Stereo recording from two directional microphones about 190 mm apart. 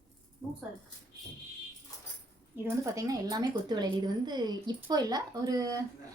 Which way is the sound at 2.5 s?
20° right (ahead or behind).